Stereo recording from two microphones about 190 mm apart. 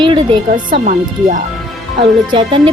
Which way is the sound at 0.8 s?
45° right (ahead or behind).